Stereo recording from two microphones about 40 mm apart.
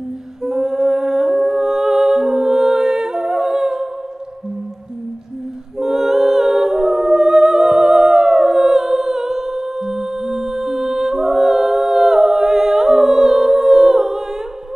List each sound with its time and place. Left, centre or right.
0.4 s music: centre
5.8 s humming: centre